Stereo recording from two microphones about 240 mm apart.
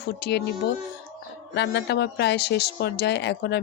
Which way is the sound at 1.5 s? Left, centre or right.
Left.